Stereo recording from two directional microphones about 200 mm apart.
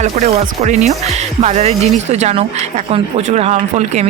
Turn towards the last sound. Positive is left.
turn(degrees=-35)  # may be behind; listen again after turning